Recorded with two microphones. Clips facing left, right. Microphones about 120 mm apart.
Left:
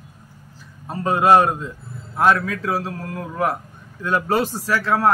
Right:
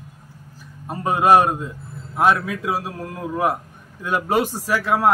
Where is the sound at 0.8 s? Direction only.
15° right (ahead or behind).